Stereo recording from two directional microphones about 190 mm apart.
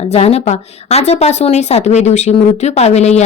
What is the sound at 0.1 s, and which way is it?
A woman's voice, 35° left (ahead or behind).